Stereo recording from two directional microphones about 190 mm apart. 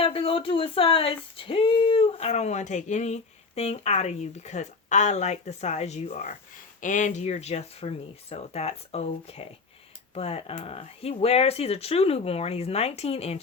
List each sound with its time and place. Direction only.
0.0 s speech: 30° left (ahead or behind)